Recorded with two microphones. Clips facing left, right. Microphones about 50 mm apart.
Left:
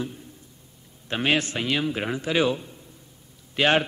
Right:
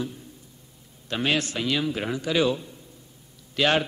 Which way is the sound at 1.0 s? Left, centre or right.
Left.